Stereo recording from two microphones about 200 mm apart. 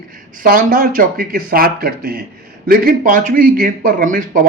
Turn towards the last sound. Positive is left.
turn(degrees=-40)  # may be behind; listen again after turning